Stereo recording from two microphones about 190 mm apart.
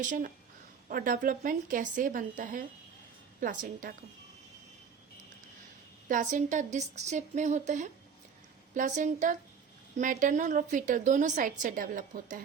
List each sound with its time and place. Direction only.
0.0 s a woman's voice: 45° right (ahead or behind)
6.1 s a woman's voice: 40° right (ahead or behind)